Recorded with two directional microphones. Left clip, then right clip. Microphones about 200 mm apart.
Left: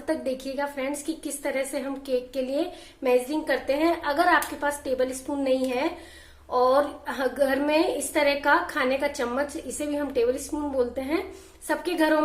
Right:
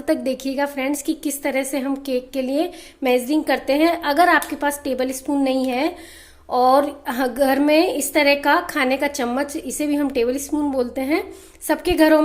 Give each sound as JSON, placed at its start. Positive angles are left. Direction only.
{"t": 0.0, "sound": "a woman's voice", "side_deg": -40}